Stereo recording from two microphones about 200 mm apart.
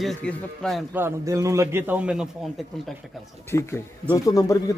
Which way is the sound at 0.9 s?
15° right (ahead or behind).